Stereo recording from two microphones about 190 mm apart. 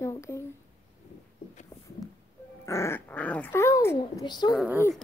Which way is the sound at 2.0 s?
20° left (ahead or behind).